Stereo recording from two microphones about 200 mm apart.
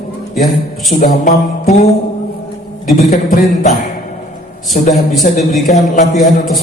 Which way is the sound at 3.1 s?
45° left (ahead or behind).